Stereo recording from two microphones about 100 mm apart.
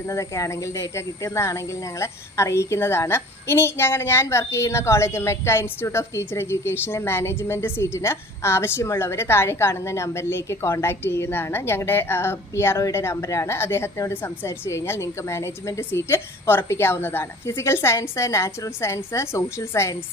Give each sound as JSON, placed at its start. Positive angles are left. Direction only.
{"t": 0.1, "sound": "speech", "side_deg": 30}